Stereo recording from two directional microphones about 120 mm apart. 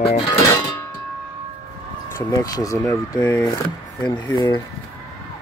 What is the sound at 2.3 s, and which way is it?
Speech, 30° left (ahead or behind).